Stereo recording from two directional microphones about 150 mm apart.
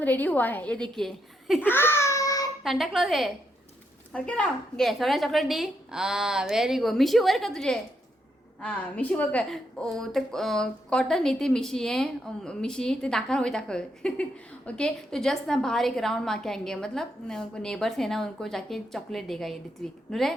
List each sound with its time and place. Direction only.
0.0 s a woman's voice: 10° left (ahead or behind)
1.6 s baby cry: 15° left (ahead or behind)
2.6 s a woman's voice: centre (ahead or behind)